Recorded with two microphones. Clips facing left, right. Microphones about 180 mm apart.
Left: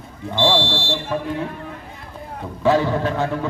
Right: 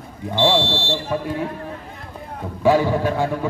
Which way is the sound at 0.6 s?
15° left (ahead or behind).